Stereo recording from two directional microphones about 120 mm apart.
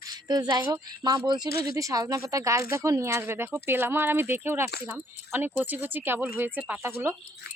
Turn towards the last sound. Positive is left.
turn(degrees=-20)  # may be behind; listen again after turning